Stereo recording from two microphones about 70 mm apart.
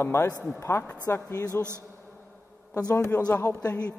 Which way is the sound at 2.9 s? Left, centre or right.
Left.